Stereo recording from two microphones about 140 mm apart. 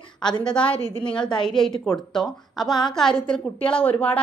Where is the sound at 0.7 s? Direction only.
40° left (ahead or behind).